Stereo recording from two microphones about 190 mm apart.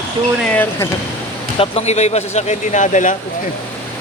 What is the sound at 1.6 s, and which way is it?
Speech, 35° left (ahead or behind).